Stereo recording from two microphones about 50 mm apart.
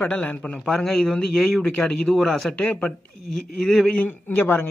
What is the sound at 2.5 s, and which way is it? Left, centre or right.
Speech, left.